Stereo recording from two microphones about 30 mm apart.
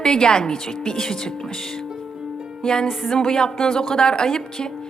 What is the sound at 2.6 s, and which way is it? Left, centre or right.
A woman's voice, left.